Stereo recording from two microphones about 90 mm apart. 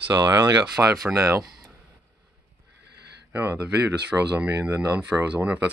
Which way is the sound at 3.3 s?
25° right (ahead or behind).